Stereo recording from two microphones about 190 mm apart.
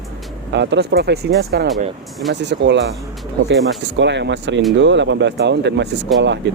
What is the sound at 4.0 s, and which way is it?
Speech, 70° right (ahead or behind).